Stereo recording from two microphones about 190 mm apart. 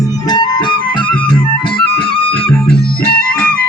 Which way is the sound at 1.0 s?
5° left (ahead or behind).